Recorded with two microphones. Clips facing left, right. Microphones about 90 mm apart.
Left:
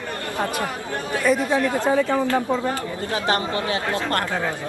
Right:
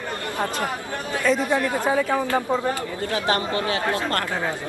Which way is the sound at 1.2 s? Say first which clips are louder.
Left 1 dB; 20° left (ahead or behind).